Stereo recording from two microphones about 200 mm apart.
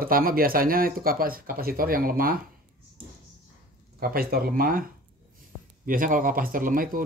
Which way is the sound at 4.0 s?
50° right (ahead or behind).